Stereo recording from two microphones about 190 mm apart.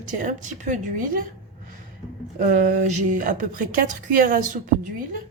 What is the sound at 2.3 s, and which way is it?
A woman's voice, 40° right (ahead or behind).